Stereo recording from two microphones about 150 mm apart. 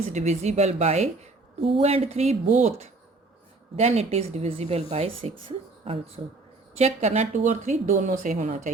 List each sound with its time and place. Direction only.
0.1 s a woman's voice: 45° right (ahead or behind)